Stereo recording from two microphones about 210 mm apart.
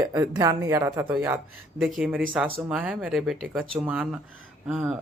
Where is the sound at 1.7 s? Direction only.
Centre (ahead or behind).